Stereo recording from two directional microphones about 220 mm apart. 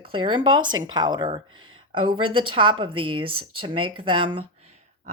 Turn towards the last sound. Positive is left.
turn(degrees=-25)  # may be behind; listen again after turning